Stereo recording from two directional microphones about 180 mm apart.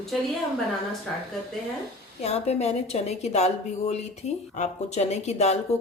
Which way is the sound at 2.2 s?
35° left (ahead or behind).